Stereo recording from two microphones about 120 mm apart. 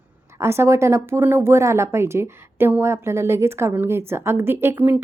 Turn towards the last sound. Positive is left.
turn(degrees=-15)  # may be behind; listen again after turning